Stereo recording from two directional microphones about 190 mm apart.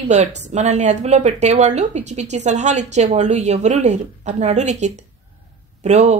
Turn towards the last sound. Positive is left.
turn(degrees=-35)  # may be behind; listen again after turning